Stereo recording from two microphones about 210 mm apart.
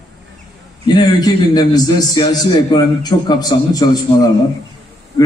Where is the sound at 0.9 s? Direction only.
20° left (ahead or behind).